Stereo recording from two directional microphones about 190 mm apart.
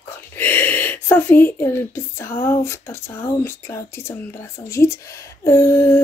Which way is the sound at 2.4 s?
15° left (ahead or behind).